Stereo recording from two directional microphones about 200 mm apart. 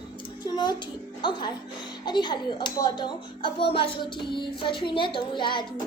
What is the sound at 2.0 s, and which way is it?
Music, 20° left (ahead or behind).